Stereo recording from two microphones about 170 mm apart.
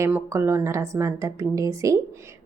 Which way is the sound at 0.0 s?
15° right (ahead or behind).